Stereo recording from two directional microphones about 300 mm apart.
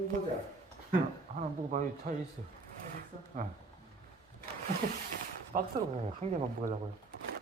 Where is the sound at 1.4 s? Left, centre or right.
Right.